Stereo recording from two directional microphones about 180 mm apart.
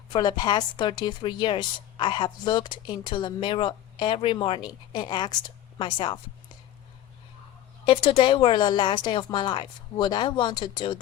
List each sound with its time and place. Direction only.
0.1 s a woman's voice: 25° left (ahead or behind)
7.9 s a woman's voice: 30° left (ahead or behind)